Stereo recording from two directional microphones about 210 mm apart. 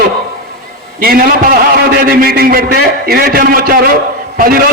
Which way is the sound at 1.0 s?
45° right (ahead or behind).